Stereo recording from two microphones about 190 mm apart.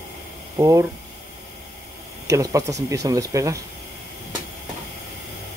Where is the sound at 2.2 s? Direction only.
15° right (ahead or behind).